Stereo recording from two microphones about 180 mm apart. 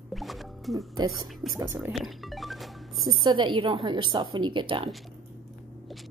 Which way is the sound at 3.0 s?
25° right (ahead or behind).